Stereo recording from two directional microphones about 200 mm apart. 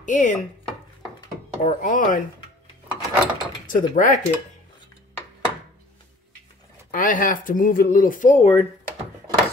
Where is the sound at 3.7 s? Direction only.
40° left (ahead or behind).